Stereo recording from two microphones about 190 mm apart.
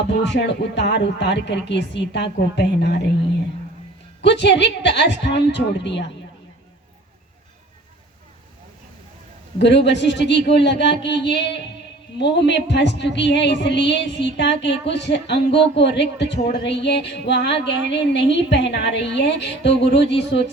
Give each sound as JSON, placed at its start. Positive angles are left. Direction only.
{"t": 0.1, "sound": "a woman's voice", "side_deg": 65}
{"t": 4.2, "sound": "a woman's voice", "side_deg": 65}
{"t": 9.6, "sound": "a woman's voice", "side_deg": 65}